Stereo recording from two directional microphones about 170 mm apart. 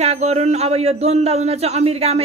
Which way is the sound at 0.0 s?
40° right (ahead or behind).